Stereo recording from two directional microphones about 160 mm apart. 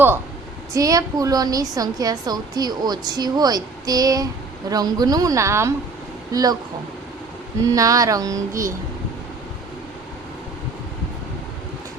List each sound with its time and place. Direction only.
0.7 s a woman's voice: 20° right (ahead or behind)
7.6 s a woman's voice: 20° right (ahead or behind)